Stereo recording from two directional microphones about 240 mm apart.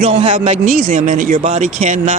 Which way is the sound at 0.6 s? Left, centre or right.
Right.